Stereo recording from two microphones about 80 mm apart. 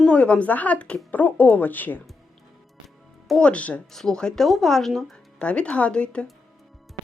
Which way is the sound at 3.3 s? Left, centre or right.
Centre.